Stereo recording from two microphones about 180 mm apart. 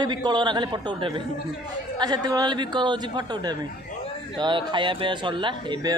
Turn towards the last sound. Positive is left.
turn(degrees=-25)  # may be behind; listen again after turning